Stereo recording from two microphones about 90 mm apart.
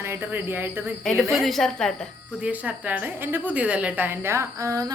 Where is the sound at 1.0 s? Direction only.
10° left (ahead or behind).